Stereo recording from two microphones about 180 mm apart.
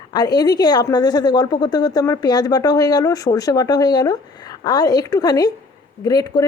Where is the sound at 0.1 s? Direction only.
20° left (ahead or behind).